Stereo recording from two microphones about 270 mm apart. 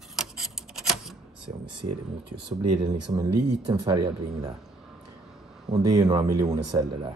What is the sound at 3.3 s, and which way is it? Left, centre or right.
Speech, right.